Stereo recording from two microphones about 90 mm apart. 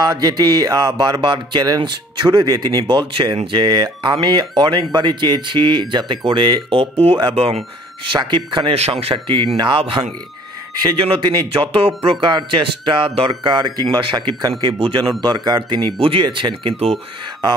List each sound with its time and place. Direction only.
0.0 s music: 45° right (ahead or behind)
1.8 s speech: 60° right (ahead or behind); by 6.9 s 75° right (ahead or behind)
8.0 s speech: 65° right (ahead or behind)
11.5 s speech: 90° right
13.3 s music: 55° right (ahead or behind)
13.8 s speech: 60° right (ahead or behind)
14.8 s speech: 80° right